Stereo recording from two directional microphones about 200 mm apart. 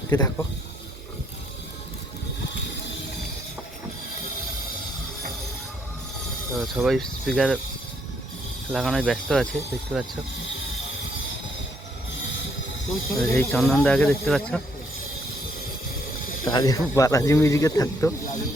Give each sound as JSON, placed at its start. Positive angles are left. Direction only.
{"t": 0.1, "sound": "a man's voice", "side_deg": 15}
{"t": 6.6, "sound": "speech", "side_deg": 0}
{"t": 8.7, "sound": "speech", "side_deg": 0}
{"t": 13.1, "sound": "speech", "side_deg": 5}
{"t": 16.5, "sound": "a man's voice", "side_deg": 20}